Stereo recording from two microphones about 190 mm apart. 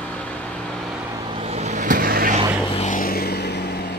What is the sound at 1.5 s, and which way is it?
Vehicle, 40° right (ahead or behind).